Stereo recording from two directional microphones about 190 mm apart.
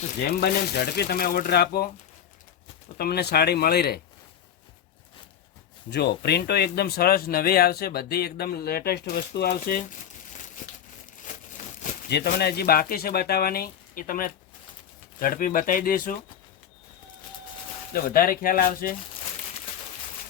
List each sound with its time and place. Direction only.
0.2 s speech: 55° left (ahead or behind)
3.0 s speech: 55° left (ahead or behind)
5.9 s speech: 60° left (ahead or behind)
12.0 s speech: 60° left (ahead or behind)
17.9 s speech: 50° left (ahead or behind)